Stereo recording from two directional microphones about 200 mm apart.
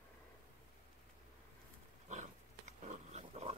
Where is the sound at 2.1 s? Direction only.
35° right (ahead or behind).